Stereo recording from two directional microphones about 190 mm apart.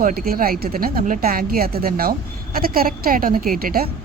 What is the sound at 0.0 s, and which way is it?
Speech, 50° right (ahead or behind).